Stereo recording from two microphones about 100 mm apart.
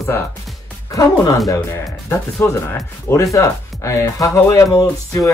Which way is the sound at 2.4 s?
25° left (ahead or behind).